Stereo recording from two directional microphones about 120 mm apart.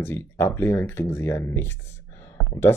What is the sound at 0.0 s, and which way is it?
Speech, 15° left (ahead or behind).